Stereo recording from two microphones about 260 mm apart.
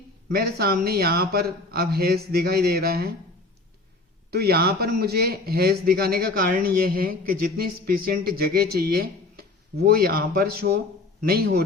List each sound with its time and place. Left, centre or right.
0.3 s speech: right
4.3 s speech: right